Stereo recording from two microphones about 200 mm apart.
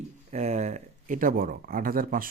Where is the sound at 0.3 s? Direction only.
35° right (ahead or behind).